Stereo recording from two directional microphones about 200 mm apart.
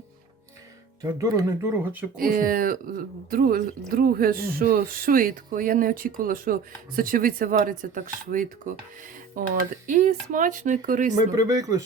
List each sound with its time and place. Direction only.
1.0 s speech: 15° right (ahead or behind)
2.1 s speech: 45° right (ahead or behind)
11.1 s speech: 20° right (ahead or behind)